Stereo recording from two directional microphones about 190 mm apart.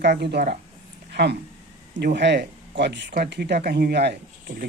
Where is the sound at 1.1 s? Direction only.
60° right (ahead or behind).